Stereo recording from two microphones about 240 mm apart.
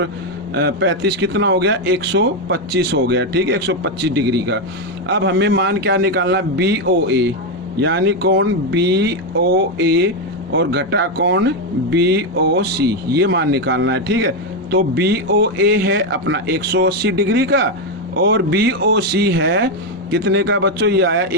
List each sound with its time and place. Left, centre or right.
0.5 s speech: right